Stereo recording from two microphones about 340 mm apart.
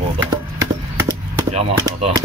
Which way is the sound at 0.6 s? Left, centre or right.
Centre.